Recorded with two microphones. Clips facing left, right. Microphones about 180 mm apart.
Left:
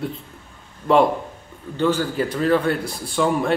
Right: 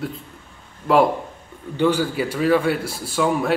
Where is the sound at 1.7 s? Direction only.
10° right (ahead or behind).